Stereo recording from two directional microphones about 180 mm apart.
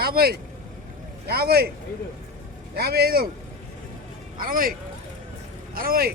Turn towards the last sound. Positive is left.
turn(degrees=-55)  # may be behind; listen again after turning